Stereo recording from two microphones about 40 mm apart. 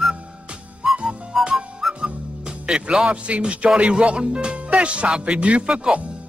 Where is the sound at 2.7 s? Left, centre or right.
Right.